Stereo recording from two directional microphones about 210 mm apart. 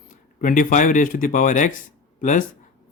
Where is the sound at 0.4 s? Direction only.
40° left (ahead or behind).